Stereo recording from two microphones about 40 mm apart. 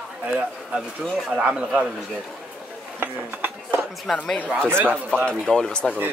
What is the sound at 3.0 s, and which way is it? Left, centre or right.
Speech, right.